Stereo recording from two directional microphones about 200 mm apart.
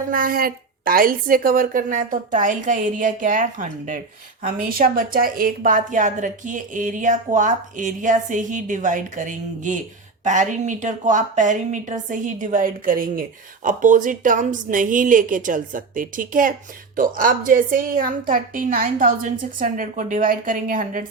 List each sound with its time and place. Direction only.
0.1 s a woman's voice: 45° right (ahead or behind)